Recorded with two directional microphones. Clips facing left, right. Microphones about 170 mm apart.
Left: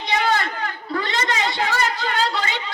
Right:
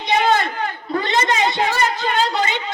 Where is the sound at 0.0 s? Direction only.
20° right (ahead or behind).